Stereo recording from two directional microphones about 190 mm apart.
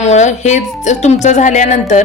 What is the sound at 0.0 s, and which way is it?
Speech, 40° left (ahead or behind).